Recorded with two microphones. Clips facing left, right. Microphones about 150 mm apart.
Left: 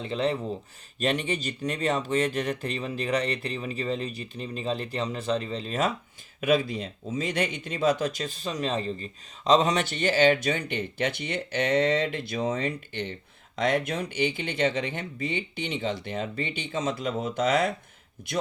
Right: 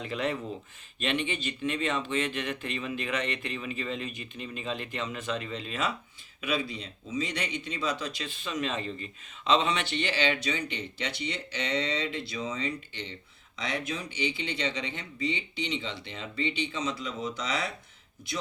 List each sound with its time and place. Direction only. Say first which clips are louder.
0.0 s speech: left 4 dB; 30° left (ahead or behind)
0.9 s speech: left 4 dB; 40° left (ahead or behind)